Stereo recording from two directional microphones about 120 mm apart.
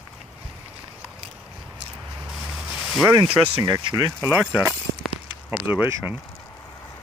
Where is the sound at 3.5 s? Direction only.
35° right (ahead or behind).